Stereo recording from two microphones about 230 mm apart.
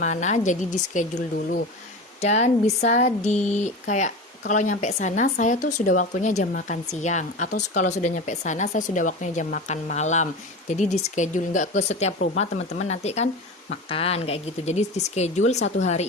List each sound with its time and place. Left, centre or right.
0.0 s a woman's voice: left